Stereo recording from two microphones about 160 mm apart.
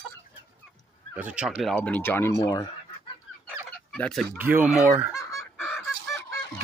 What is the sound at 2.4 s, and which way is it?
Speech, 25° left (ahead or behind).